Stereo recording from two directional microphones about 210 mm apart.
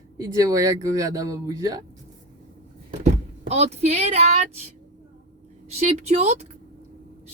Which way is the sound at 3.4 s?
30° right (ahead or behind).